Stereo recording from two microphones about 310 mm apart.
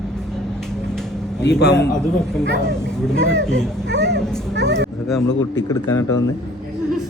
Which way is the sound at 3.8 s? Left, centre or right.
Right.